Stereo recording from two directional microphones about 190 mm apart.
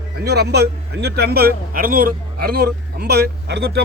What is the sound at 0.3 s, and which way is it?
A man's voice, 60° right (ahead or behind).